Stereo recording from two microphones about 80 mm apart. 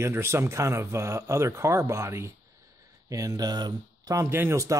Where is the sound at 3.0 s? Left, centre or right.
Right.